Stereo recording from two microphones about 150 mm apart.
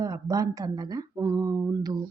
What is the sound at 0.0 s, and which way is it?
Speech, 25° right (ahead or behind).